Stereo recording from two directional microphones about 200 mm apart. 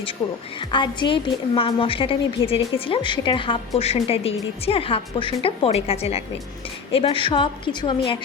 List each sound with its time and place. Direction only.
0.6 s a woman's voice: 25° left (ahead or behind)